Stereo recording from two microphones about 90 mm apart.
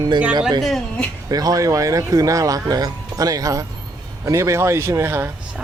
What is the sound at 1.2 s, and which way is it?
Speech, 45° right (ahead or behind).